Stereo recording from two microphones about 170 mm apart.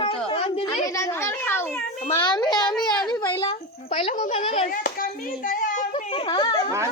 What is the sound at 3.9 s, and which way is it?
Speech, 35° left (ahead or behind).